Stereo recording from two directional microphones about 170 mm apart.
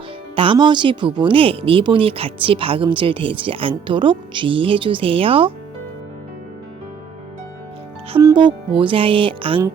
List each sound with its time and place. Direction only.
0.3 s speech: 30° right (ahead or behind)
8.2 s speech: 25° right (ahead or behind)